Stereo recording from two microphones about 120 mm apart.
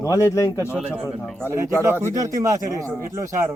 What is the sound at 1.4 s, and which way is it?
Speech, 20° right (ahead or behind).